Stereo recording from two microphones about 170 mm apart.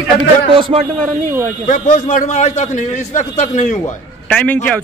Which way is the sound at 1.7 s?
50° left (ahead or behind).